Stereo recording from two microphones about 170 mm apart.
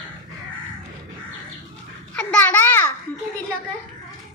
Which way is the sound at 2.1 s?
10° left (ahead or behind).